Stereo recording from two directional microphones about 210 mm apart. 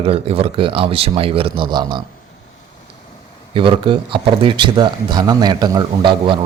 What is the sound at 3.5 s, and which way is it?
Speech, 25° right (ahead or behind).